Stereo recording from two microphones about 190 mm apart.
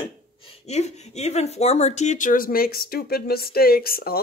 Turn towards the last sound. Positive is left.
turn(degrees=50)  # may be behind; listen again after turning